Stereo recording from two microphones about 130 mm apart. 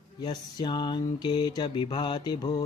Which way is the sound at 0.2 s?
35° left (ahead or behind).